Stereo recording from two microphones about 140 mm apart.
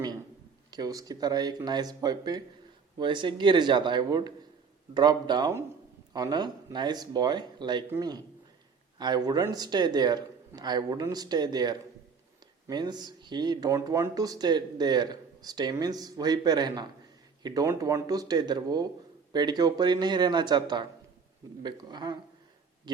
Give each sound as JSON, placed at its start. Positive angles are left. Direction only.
{"t": 0.7, "sound": "speech", "side_deg": -25}